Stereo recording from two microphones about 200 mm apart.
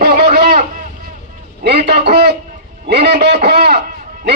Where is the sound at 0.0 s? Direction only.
50° right (ahead or behind).